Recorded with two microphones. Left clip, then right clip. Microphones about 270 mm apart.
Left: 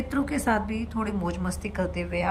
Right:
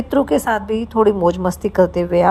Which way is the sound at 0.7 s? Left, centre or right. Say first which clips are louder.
Right 16 dB; right.